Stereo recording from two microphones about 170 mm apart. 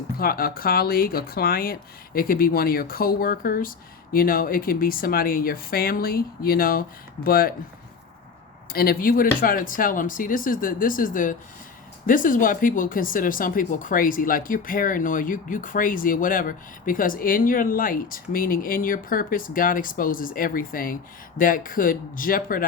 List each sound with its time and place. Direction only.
0.2 s speech: 60° left (ahead or behind)
8.7 s speech: 60° left (ahead or behind)